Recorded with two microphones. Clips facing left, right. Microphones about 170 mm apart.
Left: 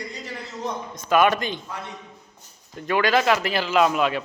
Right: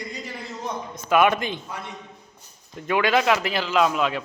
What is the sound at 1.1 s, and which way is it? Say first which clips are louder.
Speech: even; 5° right (ahead or behind).